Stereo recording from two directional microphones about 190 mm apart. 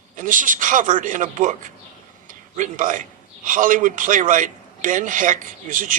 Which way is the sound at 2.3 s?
45° right (ahead or behind).